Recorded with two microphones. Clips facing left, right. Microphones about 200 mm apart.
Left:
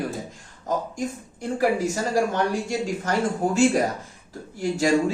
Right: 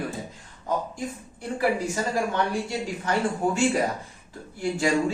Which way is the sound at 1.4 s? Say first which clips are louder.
Left 3 dB; 45° left (ahead or behind).